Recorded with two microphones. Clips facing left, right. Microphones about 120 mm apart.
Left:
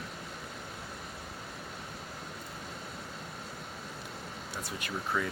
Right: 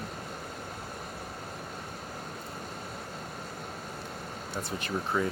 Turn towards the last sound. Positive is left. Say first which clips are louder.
# right 4 dB
turn(degrees=-30)  # may be behind; listen again after turning